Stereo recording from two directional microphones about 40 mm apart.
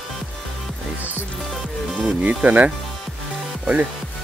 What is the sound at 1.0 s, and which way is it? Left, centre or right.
Music, right.